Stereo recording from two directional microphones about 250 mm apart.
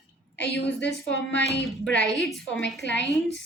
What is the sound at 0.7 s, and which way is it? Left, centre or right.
Speech, left.